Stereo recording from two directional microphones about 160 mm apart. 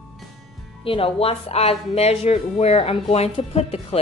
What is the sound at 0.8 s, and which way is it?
A woman's voice, 35° left (ahead or behind).